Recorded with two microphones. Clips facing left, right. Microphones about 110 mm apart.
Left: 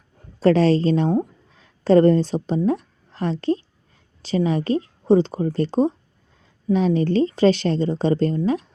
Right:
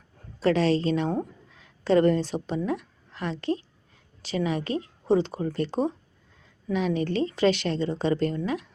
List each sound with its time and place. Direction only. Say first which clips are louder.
0.3 s a woman's voice: left 6 dB; 40° left (ahead or behind)